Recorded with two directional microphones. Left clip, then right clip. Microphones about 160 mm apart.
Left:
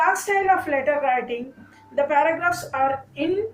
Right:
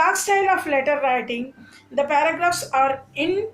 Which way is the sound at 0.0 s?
40° right (ahead or behind).